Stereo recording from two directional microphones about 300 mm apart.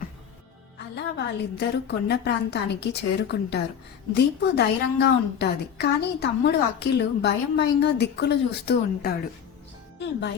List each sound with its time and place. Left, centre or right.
0.9 s a woman's voice: left